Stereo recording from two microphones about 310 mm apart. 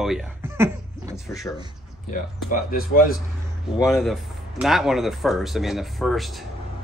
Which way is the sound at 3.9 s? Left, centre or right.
Centre.